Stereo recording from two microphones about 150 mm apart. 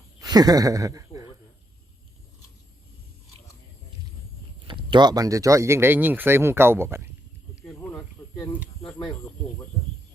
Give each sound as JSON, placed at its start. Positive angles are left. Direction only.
{"t": 0.2, "sound": "speech", "side_deg": -25}
{"t": 4.6, "sound": "speech", "side_deg": -35}
{"t": 7.6, "sound": "snake", "side_deg": 10}
{"t": 8.9, "sound": "speech", "side_deg": 5}